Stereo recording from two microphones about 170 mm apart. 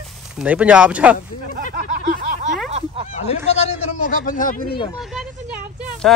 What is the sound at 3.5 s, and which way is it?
A man's voice, 40° left (ahead or behind).